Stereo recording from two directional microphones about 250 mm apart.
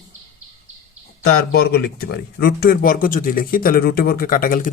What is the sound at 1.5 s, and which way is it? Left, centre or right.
Speech, left.